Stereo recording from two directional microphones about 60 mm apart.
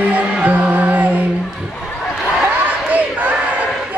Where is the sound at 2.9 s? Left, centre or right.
Right.